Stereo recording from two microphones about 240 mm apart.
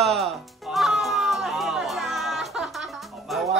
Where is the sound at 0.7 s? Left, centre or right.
Centre.